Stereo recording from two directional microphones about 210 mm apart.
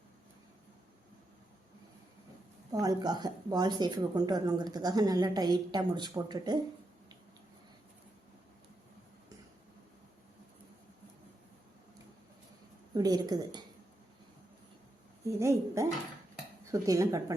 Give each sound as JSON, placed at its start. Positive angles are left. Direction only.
{"t": 2.7, "sound": "a woman's voice", "side_deg": -20}
{"t": 12.9, "sound": "a woman's voice", "side_deg": -20}
{"t": 15.3, "sound": "speech", "side_deg": -15}